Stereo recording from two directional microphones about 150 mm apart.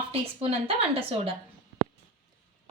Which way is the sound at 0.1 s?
40° right (ahead or behind).